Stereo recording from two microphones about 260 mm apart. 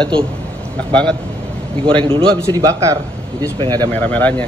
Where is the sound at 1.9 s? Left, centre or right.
Centre.